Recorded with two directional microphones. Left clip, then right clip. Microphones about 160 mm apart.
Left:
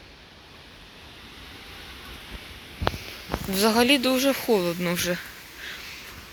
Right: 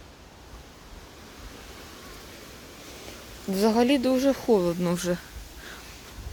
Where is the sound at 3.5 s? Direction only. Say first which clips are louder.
Left 2 dB; 20° right (ahead or behind).